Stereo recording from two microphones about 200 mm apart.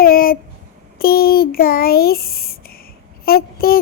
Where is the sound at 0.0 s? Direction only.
45° left (ahead or behind).